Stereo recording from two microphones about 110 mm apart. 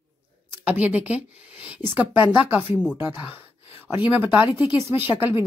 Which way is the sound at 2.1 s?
50° left (ahead or behind).